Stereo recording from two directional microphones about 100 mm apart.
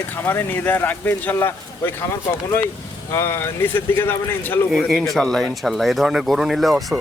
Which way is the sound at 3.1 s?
25° left (ahead or behind).